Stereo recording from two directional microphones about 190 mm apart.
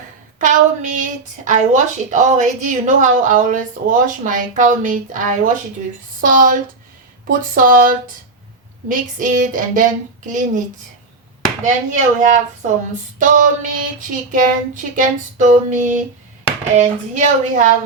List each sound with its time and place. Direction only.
0.3 s a woman's voice: 40° right (ahead or behind)
6.2 s a woman's voice: 45° right (ahead or behind)